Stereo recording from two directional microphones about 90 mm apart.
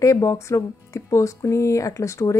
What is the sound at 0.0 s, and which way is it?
A woman's voice, 35° left (ahead or behind).